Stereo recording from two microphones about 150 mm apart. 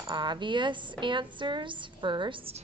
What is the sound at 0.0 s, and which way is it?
A woman's voice, 30° right (ahead or behind).